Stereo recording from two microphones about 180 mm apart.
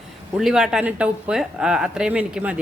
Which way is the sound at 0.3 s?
Centre (ahead or behind).